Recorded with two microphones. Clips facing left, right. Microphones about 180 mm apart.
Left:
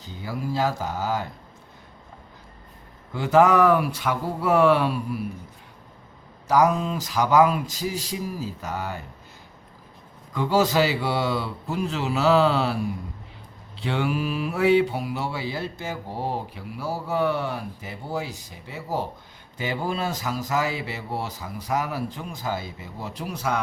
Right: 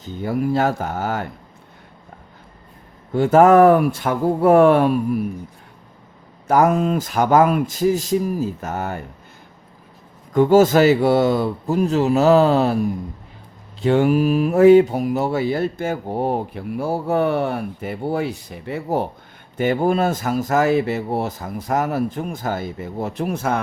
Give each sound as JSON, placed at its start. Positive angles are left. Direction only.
{"t": 0.0, "sound": "speech", "side_deg": -55}
{"t": 3.1, "sound": "speech", "side_deg": -50}
{"t": 6.5, "sound": "speech", "side_deg": -55}
{"t": 10.3, "sound": "speech", "side_deg": -50}